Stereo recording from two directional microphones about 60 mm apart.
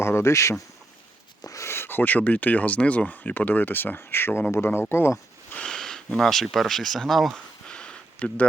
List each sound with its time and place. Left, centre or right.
0.0 s speech: left
5.5 s speech: centre
7.3 s a sound: centre